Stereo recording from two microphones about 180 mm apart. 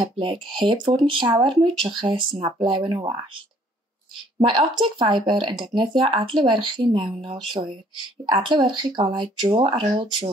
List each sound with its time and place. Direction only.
0.2 s speech: 30° right (ahead or behind)
4.5 s speech: 25° right (ahead or behind)